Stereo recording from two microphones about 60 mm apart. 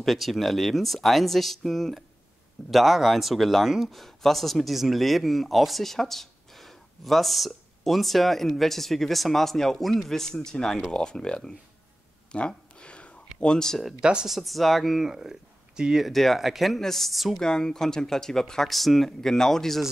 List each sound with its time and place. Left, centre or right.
0.0 s speech: centre
12.3 s a sound: centre
13.4 s speech: centre
14.0 s speech: centre
14.3 s speech: centre
16.1 s speech: centre